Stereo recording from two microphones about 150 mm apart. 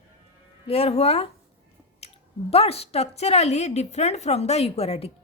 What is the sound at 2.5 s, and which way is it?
A woman's voice, 40° left (ahead or behind).